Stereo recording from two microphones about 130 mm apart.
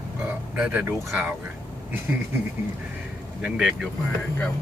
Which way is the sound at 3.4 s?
5° right (ahead or behind).